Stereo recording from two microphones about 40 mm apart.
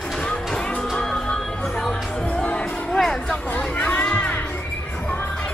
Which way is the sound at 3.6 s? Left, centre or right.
Left.